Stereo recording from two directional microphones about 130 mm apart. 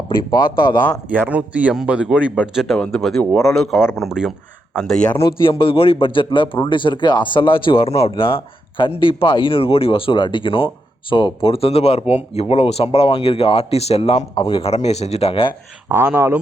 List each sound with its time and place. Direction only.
0.3 s a man's voice: 35° left (ahead or behind)
1.1 s a man's voice: 15° right (ahead or behind)
5.1 s a man's voice: 40° left (ahead or behind)
11.4 s speech: 45° left (ahead or behind)
15.9 s speech: 20° right (ahead or behind)